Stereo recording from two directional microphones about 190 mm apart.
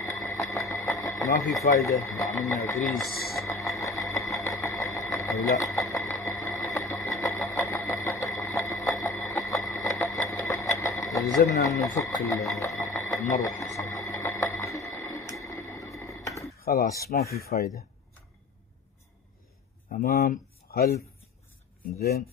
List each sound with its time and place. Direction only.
0.0 s a sound: 15° left (ahead or behind)
1.6 s speech: 15° left (ahead or behind)
3.1 s speech: 55° left (ahead or behind)
3.3 s sewing machine: 15° left (ahead or behind)
11.2 s speech: 15° left (ahead or behind)
12.6 s music: 15° left (ahead or behind)
14.6 s a sound: 15° left (ahead or behind)
16.7 s speech: 50° left (ahead or behind)
19.9 s speech: 55° left (ahead or behind)
21.9 s speech: 55° left (ahead or behind)